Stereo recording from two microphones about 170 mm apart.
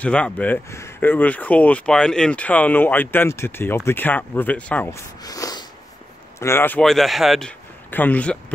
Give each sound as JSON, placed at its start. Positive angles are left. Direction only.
{"t": 0.0, "sound": "speech", "side_deg": 5}
{"t": 5.2, "sound": "snort", "side_deg": 20}
{"t": 6.4, "sound": "speech", "side_deg": 15}